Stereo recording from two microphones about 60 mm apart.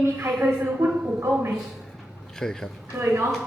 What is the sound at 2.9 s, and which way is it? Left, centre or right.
Speech, right.